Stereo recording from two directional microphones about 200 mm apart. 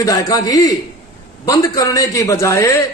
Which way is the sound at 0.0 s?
20° left (ahead or behind).